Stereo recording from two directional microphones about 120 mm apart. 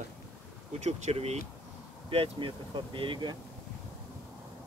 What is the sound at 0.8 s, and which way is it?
Speech, 70° right (ahead or behind).